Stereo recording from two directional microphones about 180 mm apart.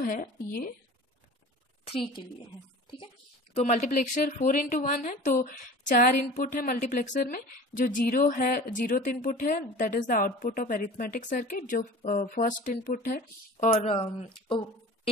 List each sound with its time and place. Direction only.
0.0 s speech: 50° left (ahead or behind)
1.9 s speech: 30° left (ahead or behind)
3.5 s speech: 40° left (ahead or behind)
13.8 s speech: 30° left (ahead or behind)